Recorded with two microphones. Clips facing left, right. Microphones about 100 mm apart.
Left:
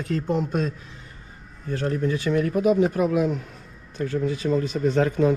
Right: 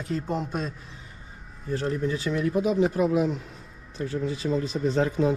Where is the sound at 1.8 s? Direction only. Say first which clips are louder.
Left 4 dB; 50° left (ahead or behind).